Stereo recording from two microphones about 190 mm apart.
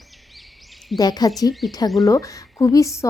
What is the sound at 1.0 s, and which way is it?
Speech, 20° left (ahead or behind).